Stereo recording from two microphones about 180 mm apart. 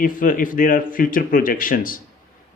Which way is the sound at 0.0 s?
50° left (ahead or behind).